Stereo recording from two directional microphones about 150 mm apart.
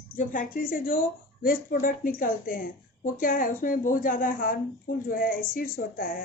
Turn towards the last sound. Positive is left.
turn(degrees=70)  # may be behind; listen again after turning